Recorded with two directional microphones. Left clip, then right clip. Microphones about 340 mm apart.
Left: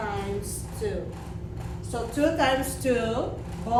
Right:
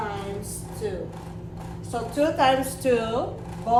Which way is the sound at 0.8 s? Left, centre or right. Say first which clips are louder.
Even; centre.